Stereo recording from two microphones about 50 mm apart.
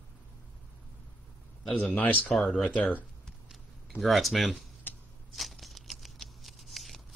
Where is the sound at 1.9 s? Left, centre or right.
Left.